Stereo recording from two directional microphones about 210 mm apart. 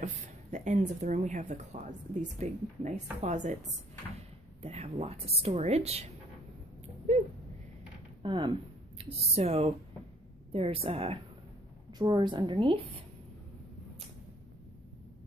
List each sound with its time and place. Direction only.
0.0 s speech: 35° right (ahead or behind)
4.6 s a woman's voice: 30° right (ahead or behind)
7.1 s a sound: 35° right (ahead or behind)
8.2 s a woman's voice: 25° right (ahead or behind)